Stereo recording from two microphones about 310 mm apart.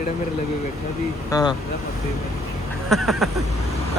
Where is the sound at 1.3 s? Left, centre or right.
Centre.